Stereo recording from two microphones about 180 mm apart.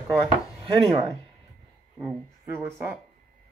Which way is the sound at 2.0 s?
10° right (ahead or behind).